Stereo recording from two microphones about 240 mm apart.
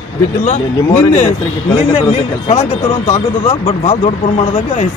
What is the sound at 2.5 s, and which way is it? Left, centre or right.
Speech, left.